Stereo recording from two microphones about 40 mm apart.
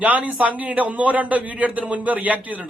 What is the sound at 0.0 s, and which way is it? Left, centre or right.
A man's voice, right.